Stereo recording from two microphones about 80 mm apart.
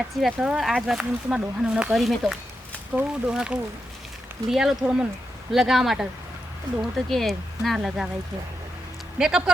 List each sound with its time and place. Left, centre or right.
0.2 s speech: centre
2.9 s speech: centre
9.1 s speech: centre